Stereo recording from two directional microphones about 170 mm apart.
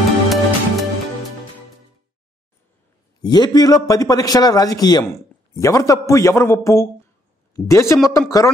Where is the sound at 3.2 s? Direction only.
25° left (ahead or behind).